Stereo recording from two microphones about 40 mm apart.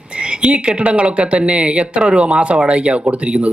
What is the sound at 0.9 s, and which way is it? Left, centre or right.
A man's voice, right.